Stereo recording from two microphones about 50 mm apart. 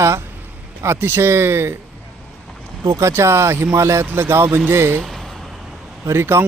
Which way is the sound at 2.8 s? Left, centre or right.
Right.